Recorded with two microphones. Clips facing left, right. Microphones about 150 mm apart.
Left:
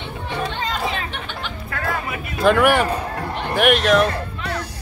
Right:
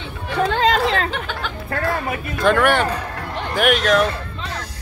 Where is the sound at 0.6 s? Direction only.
90° right.